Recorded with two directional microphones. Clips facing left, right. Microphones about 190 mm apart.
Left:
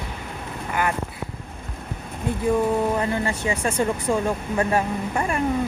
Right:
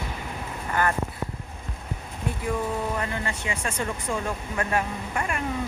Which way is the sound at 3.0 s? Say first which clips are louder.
Left 6 dB; 35° left (ahead or behind).